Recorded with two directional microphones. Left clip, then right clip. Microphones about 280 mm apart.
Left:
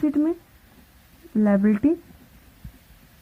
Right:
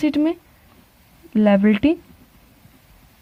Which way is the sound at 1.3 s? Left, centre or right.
Right.